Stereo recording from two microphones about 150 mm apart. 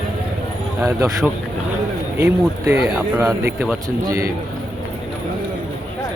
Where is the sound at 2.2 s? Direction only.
15° right (ahead or behind).